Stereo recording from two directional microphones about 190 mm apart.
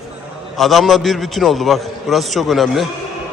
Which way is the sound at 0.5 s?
Centre (ahead or behind).